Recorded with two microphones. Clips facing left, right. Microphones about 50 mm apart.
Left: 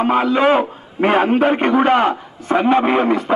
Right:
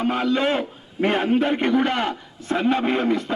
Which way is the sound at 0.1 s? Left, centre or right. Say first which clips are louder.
Left 8 dB; centre.